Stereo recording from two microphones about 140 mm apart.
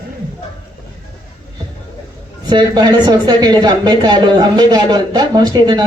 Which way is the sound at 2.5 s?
30° right (ahead or behind).